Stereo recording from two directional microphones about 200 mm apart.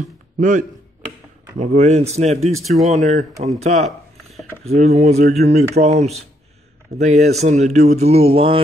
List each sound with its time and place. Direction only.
0.4 s speech: 40° right (ahead or behind)
2.6 s speech: centre (ahead or behind)
2.9 s speech: 35° right (ahead or behind)